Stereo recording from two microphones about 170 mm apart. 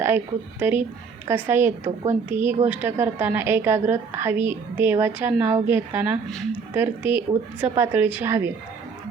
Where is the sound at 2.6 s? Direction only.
10° right (ahead or behind).